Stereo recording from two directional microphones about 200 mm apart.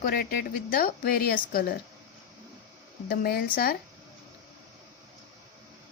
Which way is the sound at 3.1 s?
45° left (ahead or behind).